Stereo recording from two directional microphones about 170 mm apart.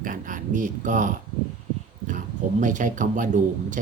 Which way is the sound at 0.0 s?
50° right (ahead or behind).